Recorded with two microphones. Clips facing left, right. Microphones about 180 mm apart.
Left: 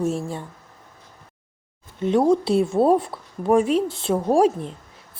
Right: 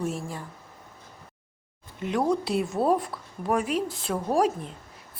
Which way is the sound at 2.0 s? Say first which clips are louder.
Left 7 dB; 30° left (ahead or behind).